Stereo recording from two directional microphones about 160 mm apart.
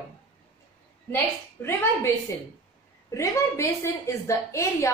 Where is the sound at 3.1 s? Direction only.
20° left (ahead or behind).